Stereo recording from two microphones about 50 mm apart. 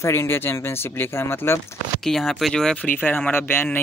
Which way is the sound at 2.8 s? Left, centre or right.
Left.